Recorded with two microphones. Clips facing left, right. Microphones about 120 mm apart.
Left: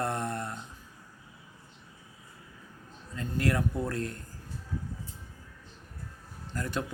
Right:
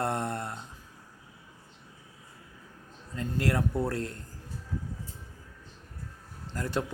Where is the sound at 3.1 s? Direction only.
30° right (ahead or behind).